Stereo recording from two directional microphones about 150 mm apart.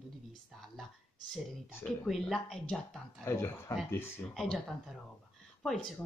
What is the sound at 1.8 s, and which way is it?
Speech, centre (ahead or behind).